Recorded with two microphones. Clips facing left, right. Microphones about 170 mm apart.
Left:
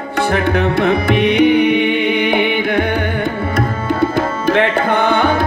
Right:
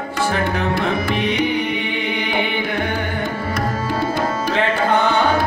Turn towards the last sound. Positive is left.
turn(degrees=60)  # may be behind; listen again after turning